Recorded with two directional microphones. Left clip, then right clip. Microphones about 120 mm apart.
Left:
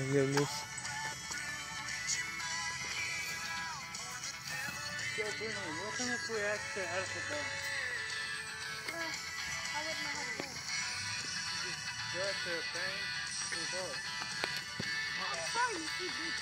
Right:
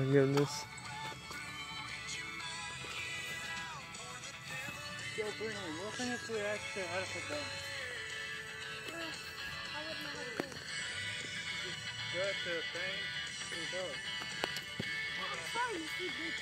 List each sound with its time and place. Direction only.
0.1 s speech: 25° right (ahead or behind)
5.1 s music: 35° right (ahead or behind)
6.8 s speech: 45° right (ahead or behind)
12.2 s speech: 55° right (ahead or behind)
15.1 s music: 65° right (ahead or behind)